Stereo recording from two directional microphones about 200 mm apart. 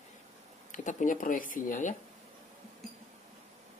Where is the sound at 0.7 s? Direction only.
40° left (ahead or behind).